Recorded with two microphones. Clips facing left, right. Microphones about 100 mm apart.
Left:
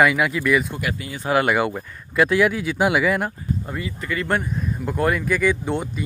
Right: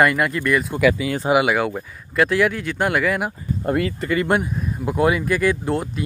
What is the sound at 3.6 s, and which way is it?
Speech, 65° right (ahead or behind).